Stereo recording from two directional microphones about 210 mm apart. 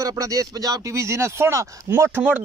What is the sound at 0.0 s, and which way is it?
Speech, 15° right (ahead or behind).